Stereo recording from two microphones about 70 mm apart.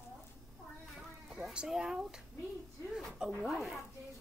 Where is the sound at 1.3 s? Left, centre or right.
Centre.